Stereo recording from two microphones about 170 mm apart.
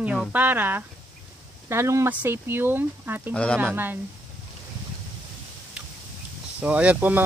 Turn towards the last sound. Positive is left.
turn(degrees=-10)  # may be behind; listen again after turning